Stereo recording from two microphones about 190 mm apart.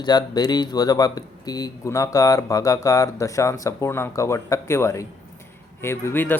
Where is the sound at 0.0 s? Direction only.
20° left (ahead or behind).